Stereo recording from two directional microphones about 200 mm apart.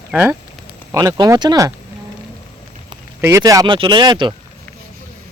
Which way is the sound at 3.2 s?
15° right (ahead or behind).